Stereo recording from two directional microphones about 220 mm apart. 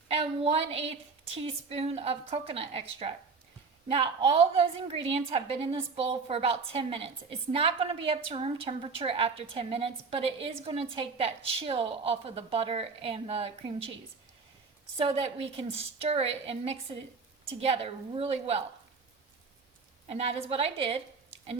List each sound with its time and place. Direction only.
0.1 s a woman's voice: 25° right (ahead or behind)
14.9 s a woman's voice: 25° right (ahead or behind)
20.1 s a woman's voice: 30° right (ahead or behind)